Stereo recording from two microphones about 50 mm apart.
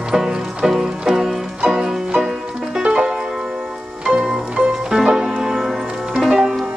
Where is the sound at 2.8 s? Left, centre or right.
Right.